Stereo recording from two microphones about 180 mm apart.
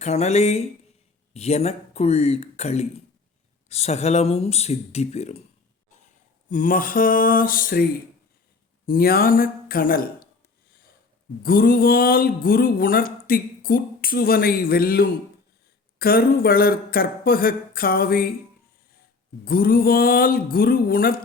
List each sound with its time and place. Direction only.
0.0 s speech: 35° left (ahead or behind)
6.5 s speech: 50° left (ahead or behind)
8.9 s speech: 55° left (ahead or behind)
11.4 s speech: 55° left (ahead or behind)
19.5 s speech: 55° left (ahead or behind)